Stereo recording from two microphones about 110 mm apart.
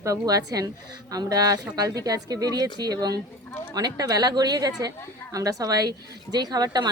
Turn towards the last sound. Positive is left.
turn(degrees=-35)  # may be behind; listen again after turning